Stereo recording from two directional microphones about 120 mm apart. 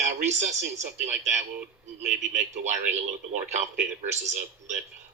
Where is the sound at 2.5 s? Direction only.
80° right.